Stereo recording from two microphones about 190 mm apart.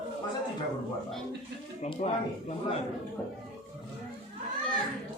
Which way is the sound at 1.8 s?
35° left (ahead or behind).